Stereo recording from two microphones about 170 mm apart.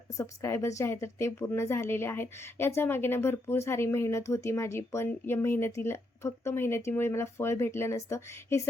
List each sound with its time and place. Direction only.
0.2 s a woman's voice: 15° left (ahead or behind)